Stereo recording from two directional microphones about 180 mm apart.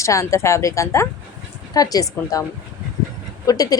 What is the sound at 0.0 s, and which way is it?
A woman's voice, 15° left (ahead or behind).